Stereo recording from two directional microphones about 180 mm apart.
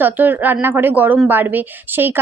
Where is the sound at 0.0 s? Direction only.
10° right (ahead or behind).